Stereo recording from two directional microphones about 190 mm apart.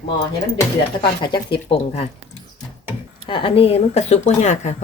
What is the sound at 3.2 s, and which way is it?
Speech, 25° left (ahead or behind).